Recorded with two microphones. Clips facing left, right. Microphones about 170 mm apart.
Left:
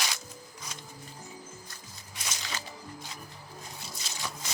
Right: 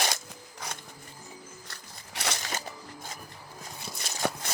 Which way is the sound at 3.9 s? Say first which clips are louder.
Right 10 dB; 60° right (ahead or behind).